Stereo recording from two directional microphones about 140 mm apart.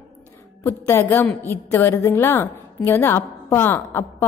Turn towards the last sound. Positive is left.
turn(degrees=15)  # may be behind; listen again after turning